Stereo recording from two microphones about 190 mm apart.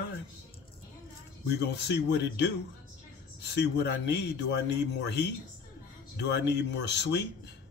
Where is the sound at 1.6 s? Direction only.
60° left (ahead or behind).